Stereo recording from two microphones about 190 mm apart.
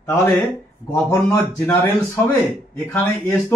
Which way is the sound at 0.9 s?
15° left (ahead or behind).